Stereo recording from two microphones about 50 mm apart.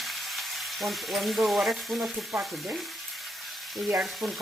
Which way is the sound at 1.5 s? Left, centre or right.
Centre.